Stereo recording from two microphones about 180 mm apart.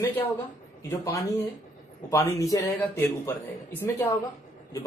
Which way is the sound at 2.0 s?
15° left (ahead or behind).